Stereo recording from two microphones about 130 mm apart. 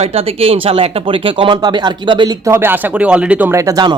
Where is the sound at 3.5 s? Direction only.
25° right (ahead or behind).